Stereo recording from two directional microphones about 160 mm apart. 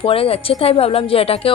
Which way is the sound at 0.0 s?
35° left (ahead or behind).